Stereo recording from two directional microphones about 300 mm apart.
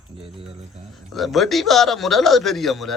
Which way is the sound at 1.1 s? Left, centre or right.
Centre.